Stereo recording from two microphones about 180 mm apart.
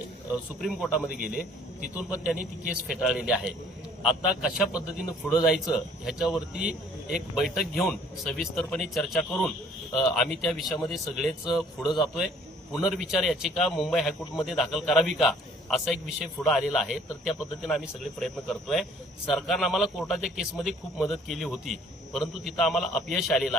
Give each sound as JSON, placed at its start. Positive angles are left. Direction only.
{"t": 0.6, "sound": "a man's voice", "side_deg": 0}
{"t": 1.1, "sound": "a man's voice", "side_deg": 60}
{"t": 2.9, "sound": "a man's voice", "side_deg": 0}